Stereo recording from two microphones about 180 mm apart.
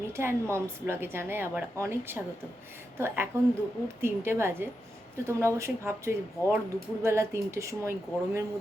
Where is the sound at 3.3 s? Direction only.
15° right (ahead or behind).